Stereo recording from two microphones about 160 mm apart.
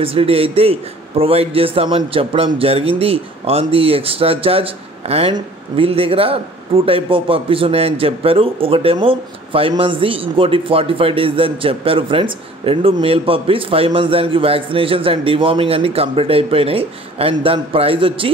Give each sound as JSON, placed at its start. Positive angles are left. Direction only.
{"t": 0.0, "sound": "speech", "side_deg": -35}